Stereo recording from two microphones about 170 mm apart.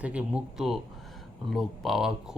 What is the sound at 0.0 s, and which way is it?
Speech, 5° right (ahead or behind).